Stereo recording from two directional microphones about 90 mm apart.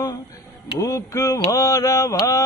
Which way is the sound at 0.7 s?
40° left (ahead or behind).